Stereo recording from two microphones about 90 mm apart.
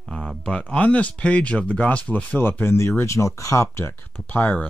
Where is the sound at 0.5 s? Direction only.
10° left (ahead or behind).